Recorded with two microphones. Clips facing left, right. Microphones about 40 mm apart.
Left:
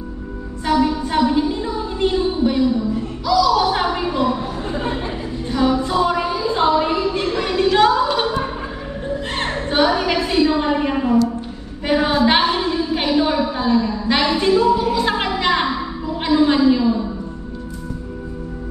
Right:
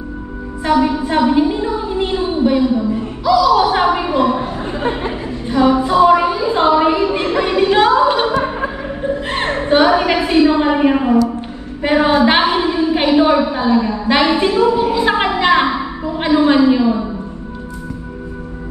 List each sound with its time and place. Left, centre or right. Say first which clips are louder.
0.7 s a woman's voice: right 3 dB; centre
2.7 s speech: right 3 dB; right
3.3 s a sound: right 4 dB; centre